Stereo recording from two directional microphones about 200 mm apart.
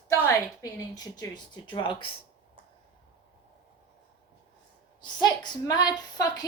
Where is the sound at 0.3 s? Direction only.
20° left (ahead or behind).